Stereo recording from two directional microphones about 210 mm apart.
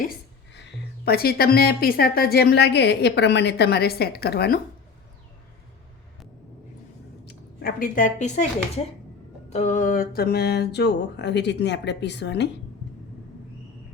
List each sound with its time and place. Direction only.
0.5 s a woman's voice: 50° left (ahead or behind)
7.3 s a woman's voice: 45° left (ahead or behind)